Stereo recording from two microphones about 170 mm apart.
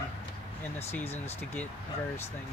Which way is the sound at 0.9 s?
10° left (ahead or behind).